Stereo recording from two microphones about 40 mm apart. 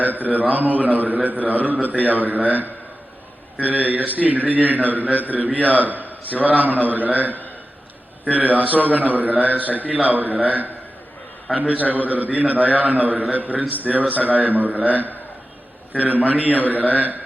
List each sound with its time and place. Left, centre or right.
0.0 s a man's voice: right